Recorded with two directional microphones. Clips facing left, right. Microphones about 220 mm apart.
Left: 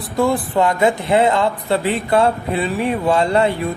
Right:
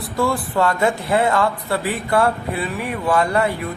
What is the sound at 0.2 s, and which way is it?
Speech, 20° left (ahead or behind).